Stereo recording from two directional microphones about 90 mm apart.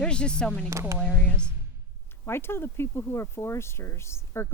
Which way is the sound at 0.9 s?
10° left (ahead or behind).